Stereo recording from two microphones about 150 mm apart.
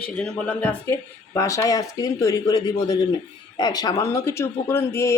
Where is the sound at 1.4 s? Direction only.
20° left (ahead or behind).